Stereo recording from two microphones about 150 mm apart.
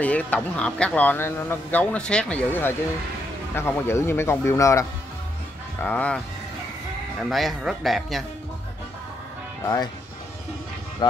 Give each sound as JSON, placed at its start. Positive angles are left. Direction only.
{"t": 0.0, "sound": "speech", "side_deg": 10}
{"t": 5.9, "sound": "speech", "side_deg": 10}
{"t": 11.0, "sound": "speech", "side_deg": 30}